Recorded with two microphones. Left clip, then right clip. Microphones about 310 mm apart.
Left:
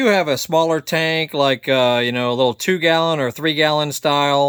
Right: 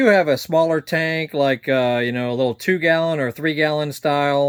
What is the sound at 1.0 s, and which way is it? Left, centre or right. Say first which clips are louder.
Speech: left 4 dB; left.